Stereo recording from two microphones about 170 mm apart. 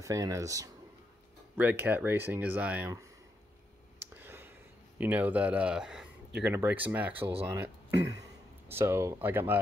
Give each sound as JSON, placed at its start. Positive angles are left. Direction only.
{"t": 0.0, "sound": "speech", "side_deg": -20}
{"t": 4.0, "sound": "a sound", "side_deg": -10}
{"t": 4.9, "sound": "speech", "side_deg": -10}